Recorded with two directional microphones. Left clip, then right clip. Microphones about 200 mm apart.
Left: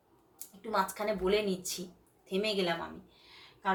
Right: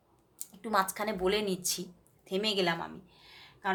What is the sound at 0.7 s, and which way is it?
Speech, 50° right (ahead or behind).